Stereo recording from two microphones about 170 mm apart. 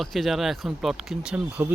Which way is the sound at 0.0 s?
Centre (ahead or behind).